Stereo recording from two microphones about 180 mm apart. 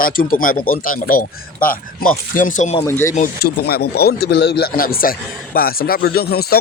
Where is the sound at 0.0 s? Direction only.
50° left (ahead or behind).